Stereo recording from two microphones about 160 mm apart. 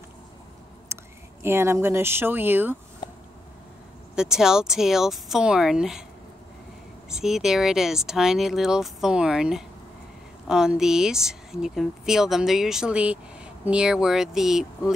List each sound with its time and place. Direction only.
0.9 s a sound: 15° right (ahead or behind)
1.4 s speech: 15° right (ahead or behind)
4.1 s speech: 5° right (ahead or behind)
7.1 s speech: 5° right (ahead or behind)